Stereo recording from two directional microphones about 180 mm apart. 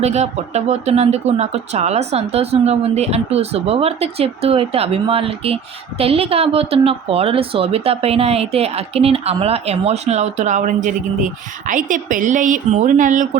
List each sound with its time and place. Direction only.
0.0 s a woman's voice: 40° right (ahead or behind)